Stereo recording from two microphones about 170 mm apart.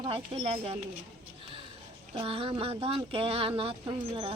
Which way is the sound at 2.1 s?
35° right (ahead or behind).